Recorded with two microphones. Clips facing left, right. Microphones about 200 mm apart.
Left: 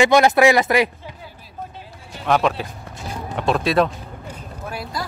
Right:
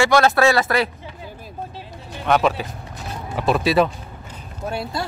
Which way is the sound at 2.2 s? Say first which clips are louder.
Right 1 dB; centre (ahead or behind).